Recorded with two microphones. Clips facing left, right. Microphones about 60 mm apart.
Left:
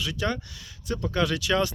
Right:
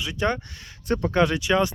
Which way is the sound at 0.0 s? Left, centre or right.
Right.